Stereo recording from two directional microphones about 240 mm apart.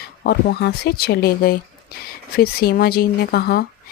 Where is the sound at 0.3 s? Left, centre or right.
Left.